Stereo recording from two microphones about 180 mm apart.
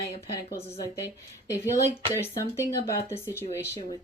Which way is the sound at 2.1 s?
15° left (ahead or behind).